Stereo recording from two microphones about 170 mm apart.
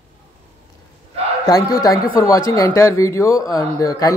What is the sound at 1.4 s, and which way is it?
A man's voice, 20° left (ahead or behind).